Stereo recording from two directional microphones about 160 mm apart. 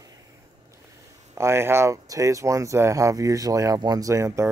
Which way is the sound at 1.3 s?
15° right (ahead or behind).